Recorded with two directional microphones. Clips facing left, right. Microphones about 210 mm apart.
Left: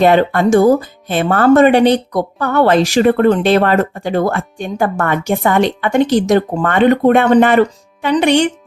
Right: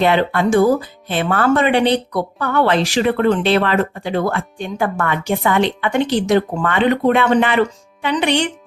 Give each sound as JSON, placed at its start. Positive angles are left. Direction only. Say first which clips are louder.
{"t": 0.0, "sound": "speech", "louder": "left 5 dB", "side_deg": 45}